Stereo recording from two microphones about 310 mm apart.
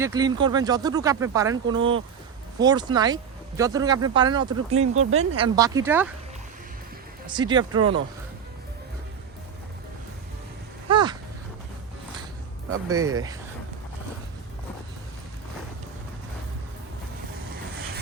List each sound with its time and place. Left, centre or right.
0.0 s speech: centre
1.8 s speech: right
2.6 s speech: centre
7.3 s speech: centre
10.8 s a sound: centre
12.9 s speech: centre